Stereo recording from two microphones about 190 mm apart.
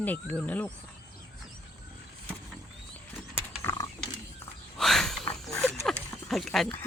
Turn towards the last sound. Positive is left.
turn(degrees=5)  # may be behind; listen again after turning